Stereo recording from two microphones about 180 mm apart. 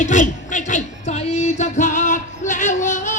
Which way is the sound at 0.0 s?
45° left (ahead or behind).